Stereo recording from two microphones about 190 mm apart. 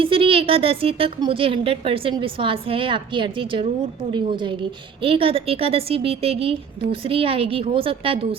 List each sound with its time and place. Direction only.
0.0 s a woman's voice: 30° right (ahead or behind)